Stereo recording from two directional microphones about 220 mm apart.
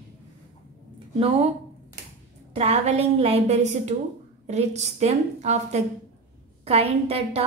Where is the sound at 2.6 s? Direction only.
30° right (ahead or behind).